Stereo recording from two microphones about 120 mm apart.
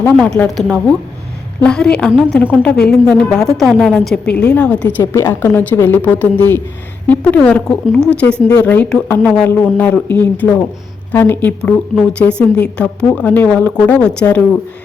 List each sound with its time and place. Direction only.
0.0 s a woman's voice: 10° left (ahead or behind)
5.1 s a woman's voice: 20° left (ahead or behind)